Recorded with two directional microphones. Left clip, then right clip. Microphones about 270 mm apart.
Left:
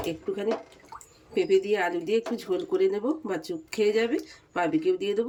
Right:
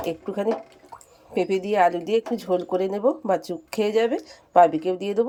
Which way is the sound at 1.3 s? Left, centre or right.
Centre.